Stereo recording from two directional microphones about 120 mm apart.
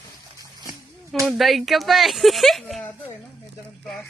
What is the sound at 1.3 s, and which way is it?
Speech, centre (ahead or behind).